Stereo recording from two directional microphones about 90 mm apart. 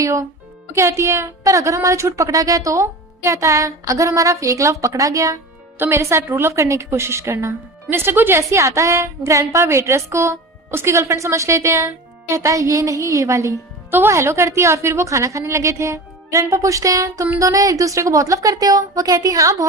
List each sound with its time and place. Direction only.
0.0 s a woman's voice: 35° right (ahead or behind)